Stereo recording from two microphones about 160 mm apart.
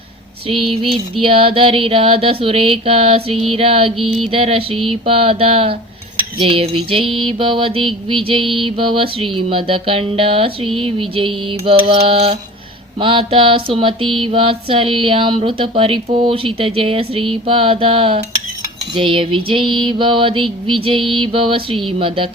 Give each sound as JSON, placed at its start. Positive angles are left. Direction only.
{"t": 0.4, "sound": "music", "side_deg": -35}